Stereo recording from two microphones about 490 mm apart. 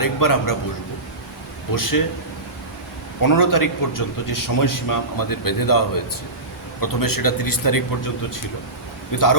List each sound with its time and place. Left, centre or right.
0.0 s a man's voice: left
1.7 s a man's voice: left
3.2 s a man's voice: left
9.1 s a man's voice: left